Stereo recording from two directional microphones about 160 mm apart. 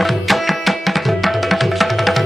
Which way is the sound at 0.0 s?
Centre (ahead or behind).